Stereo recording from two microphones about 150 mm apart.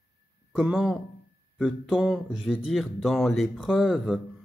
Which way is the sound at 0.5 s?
5° right (ahead or behind).